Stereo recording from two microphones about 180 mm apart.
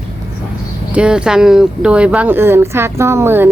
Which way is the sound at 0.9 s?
5° right (ahead or behind).